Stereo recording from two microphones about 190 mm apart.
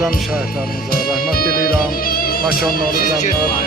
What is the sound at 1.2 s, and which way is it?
Speech, 50° left (ahead or behind).